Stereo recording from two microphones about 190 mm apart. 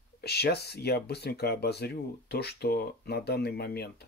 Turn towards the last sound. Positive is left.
turn(degrees=55)  # may be behind; listen again after turning